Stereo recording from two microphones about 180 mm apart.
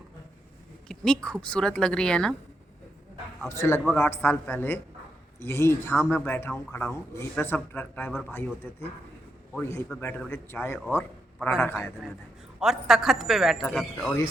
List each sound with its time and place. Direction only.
0.9 s a woman's voice: 5° left (ahead or behind)
3.5 s speech: 15° left (ahead or behind)
9.6 s speech: 15° left (ahead or behind)
10.9 s a sound: 15° left (ahead or behind)
11.6 s speech: 15° left (ahead or behind)
12.5 s a woman's voice: centre (ahead or behind)